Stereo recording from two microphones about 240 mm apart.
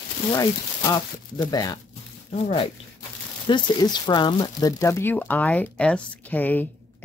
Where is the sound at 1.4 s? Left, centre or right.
Centre.